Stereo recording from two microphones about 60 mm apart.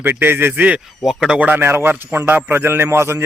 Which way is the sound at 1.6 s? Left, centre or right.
Right.